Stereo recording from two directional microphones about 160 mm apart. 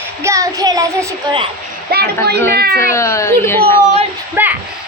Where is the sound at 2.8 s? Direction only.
20° left (ahead or behind).